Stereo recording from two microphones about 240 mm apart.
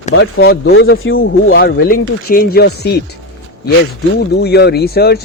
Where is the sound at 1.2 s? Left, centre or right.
Left.